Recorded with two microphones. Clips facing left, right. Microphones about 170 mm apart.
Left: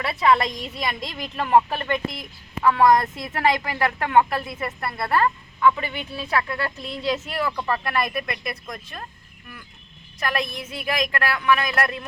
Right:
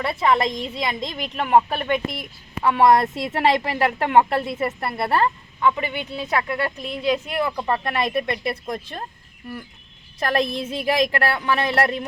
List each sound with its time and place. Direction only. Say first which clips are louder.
0.2 s a woman's voice: left 1 dB; 20° right (ahead or behind)
10.2 s speech: right 5 dB; 35° right (ahead or behind)